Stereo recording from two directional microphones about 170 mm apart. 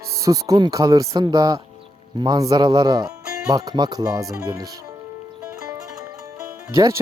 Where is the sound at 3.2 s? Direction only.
5° right (ahead or behind).